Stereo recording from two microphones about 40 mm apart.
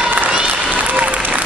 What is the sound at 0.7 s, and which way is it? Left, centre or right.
Applause, right.